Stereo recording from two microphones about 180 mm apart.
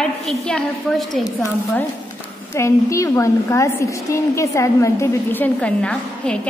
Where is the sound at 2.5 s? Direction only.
15° left (ahead or behind).